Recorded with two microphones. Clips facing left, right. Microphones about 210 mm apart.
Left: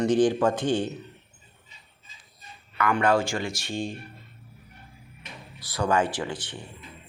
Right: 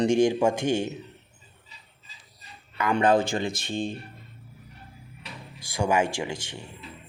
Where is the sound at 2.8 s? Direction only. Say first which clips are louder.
Right 1 dB; 20° right (ahead or behind).